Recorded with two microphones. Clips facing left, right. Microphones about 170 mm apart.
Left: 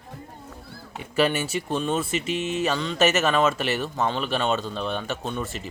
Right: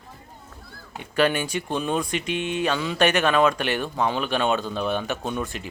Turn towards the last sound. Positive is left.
turn(degrees=0)  # may be behind; listen again after turning